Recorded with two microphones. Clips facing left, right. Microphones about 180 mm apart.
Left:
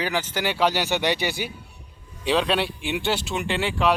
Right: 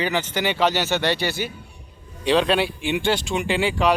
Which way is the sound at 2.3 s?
Centre (ahead or behind).